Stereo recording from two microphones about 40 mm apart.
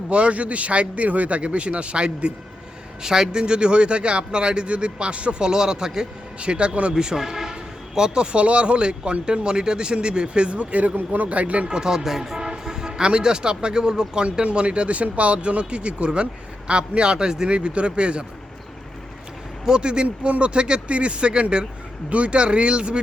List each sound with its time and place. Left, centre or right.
0.1 s a man's voice: right
3.0 s speech: centre
6.4 s speech: right
6.9 s a man's voice: centre; by 11.7 s right
11.7 s speech: centre
12.0 s speech: centre; by 18.3 s right
19.6 s speech: right